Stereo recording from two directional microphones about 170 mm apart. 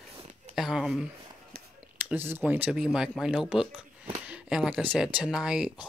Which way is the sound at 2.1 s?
10° right (ahead or behind).